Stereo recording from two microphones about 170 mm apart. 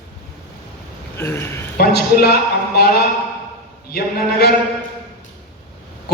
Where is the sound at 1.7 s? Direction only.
70° left (ahead or behind).